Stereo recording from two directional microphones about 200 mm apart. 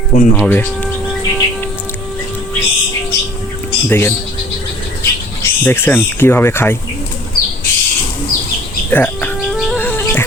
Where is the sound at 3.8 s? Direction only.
10° left (ahead or behind).